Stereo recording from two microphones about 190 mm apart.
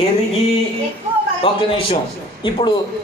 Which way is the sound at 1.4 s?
30° left (ahead or behind).